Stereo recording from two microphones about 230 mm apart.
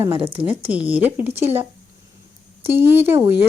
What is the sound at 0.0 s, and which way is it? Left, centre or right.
Speech, right.